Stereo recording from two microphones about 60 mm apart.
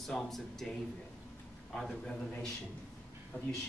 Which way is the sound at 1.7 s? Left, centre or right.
Centre.